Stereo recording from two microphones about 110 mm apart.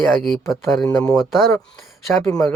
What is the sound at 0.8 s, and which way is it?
Speech, 30° left (ahead or behind).